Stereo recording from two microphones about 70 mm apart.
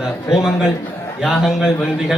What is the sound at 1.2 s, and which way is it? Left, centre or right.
Speech, centre.